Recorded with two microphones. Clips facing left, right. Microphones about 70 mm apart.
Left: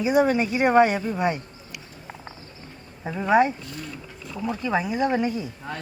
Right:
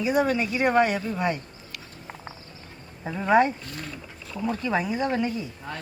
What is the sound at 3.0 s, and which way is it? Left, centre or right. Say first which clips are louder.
A man's voice: left 1 dB; centre.